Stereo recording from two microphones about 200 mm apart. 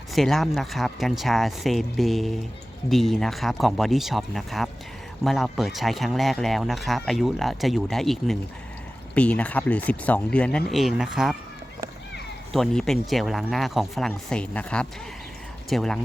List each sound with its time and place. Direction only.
0.1 s speech: centre (ahead or behind)
12.5 s speech: centre (ahead or behind)